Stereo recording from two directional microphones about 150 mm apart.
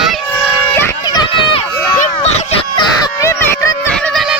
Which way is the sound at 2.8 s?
25° left (ahead or behind).